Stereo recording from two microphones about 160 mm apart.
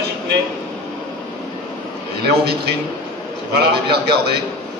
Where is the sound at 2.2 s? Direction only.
90° right.